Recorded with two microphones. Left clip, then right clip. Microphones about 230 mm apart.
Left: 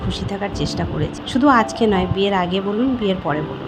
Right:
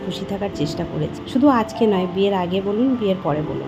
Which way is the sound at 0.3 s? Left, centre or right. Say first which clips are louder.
Even; centre.